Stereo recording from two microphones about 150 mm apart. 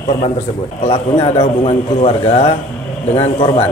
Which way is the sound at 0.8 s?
45° left (ahead or behind).